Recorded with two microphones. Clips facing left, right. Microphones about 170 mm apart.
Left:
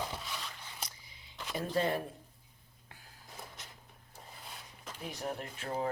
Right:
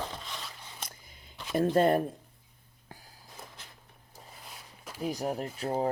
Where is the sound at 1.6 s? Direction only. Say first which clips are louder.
Right 8 dB; 50° right (ahead or behind).